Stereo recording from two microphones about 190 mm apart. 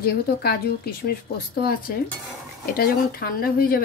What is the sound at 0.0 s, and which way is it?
Speech, 55° left (ahead or behind).